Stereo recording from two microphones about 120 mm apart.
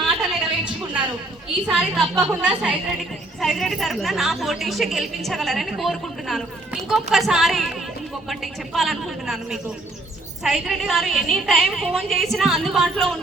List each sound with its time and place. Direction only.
0.0 s music: 5° right (ahead or behind)
2.2 s a woman's voice: 10° right (ahead or behind)